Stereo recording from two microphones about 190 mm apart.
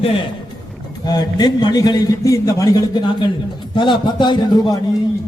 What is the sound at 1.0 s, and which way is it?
A man's voice, 20° left (ahead or behind).